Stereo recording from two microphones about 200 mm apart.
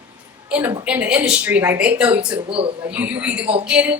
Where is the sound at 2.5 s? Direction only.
25° right (ahead or behind).